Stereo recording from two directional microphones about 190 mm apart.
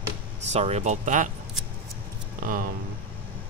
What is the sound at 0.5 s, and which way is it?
Speech, 35° right (ahead or behind).